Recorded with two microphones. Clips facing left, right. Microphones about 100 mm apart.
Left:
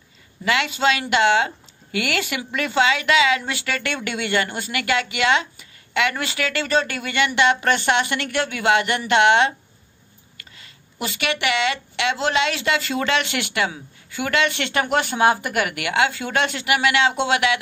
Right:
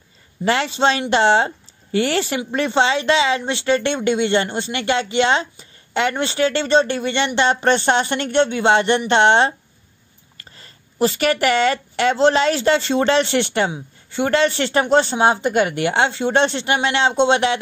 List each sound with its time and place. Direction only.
0.5 s speech: 35° right (ahead or behind)